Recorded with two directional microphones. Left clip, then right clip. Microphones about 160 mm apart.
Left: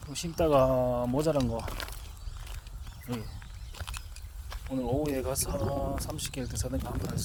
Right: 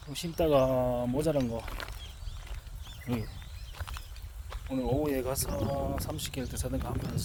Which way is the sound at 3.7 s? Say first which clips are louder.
Left 2 dB; 55° left (ahead or behind).